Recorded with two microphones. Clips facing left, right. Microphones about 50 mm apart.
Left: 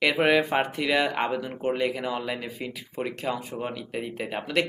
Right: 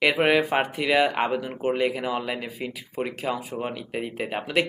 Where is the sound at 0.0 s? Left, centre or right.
Centre.